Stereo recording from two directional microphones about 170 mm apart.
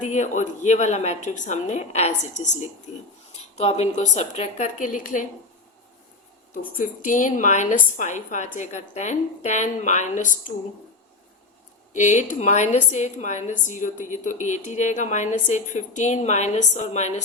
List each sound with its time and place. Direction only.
0.0 s a woman's voice: 45° left (ahead or behind)
3.5 s a woman's voice: 40° left (ahead or behind)
6.5 s a woman's voice: 55° left (ahead or behind)
11.9 s a woman's voice: 45° left (ahead or behind)